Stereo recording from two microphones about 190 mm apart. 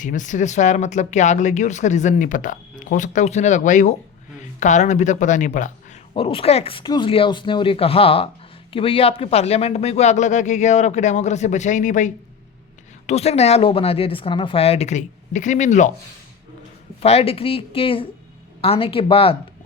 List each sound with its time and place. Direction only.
0.0 s speech: 40° left (ahead or behind)
17.0 s speech: 30° left (ahead or behind)